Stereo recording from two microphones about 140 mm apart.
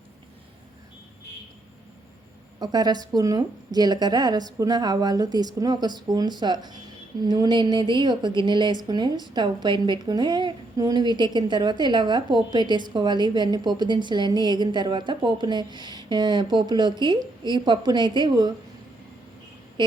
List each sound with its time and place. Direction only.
2.6 s a woman's voice: 30° right (ahead or behind)